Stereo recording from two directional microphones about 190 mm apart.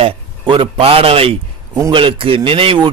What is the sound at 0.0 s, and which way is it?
Speech, 30° right (ahead or behind).